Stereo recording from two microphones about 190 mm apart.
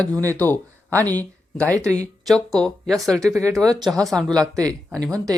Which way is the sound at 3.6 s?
20° right (ahead or behind).